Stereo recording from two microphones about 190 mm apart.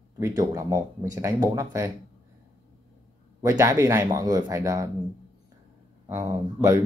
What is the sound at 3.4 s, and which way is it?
Speech, 15° right (ahead or behind).